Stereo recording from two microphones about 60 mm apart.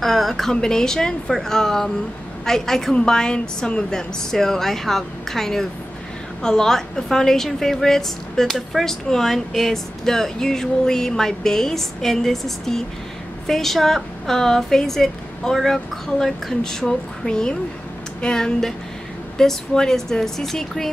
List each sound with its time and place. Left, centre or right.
0.0 s a woman's voice: centre